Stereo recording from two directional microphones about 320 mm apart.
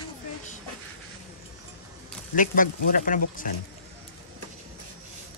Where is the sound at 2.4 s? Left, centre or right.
Left.